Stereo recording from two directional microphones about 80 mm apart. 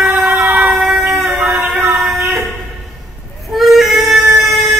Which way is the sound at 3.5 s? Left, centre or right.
Centre.